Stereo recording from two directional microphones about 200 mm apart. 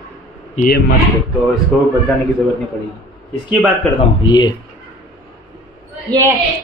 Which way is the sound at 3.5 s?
5° right (ahead or behind).